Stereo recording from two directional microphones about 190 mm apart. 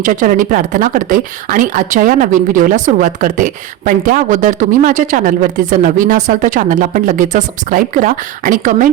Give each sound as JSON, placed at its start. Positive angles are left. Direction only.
{"t": 0.0, "sound": "speech", "side_deg": -45}